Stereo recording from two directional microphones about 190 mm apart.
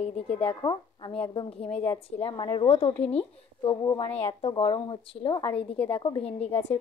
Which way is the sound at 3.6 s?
25° left (ahead or behind).